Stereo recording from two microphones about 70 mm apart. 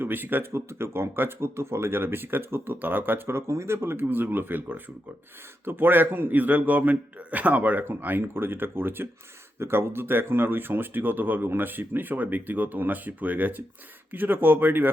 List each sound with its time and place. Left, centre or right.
0.0 s speech: right